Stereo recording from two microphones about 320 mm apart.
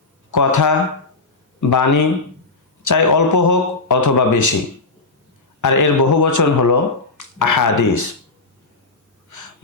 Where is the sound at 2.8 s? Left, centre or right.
Left.